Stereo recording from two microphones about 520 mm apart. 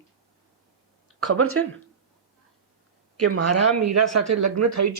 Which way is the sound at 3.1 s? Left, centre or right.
Right.